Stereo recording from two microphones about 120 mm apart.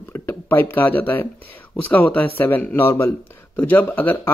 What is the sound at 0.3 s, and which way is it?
Speech, 20° left (ahead or behind).